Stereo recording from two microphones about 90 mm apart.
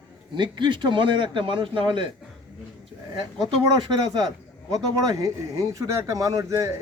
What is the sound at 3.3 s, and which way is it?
Speech, 50° right (ahead or behind).